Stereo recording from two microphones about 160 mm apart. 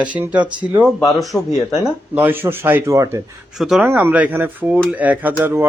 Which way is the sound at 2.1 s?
10° right (ahead or behind).